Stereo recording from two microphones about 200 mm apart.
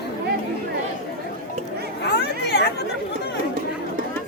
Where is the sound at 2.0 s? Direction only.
55° left (ahead or behind).